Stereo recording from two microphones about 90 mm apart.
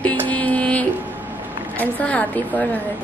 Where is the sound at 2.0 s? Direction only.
15° left (ahead or behind).